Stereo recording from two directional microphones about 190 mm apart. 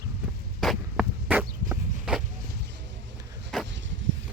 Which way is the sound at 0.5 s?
Centre (ahead or behind).